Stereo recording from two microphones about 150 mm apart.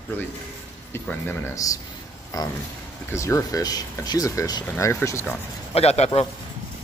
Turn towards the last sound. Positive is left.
turn(degrees=45)  # may be behind; listen again after turning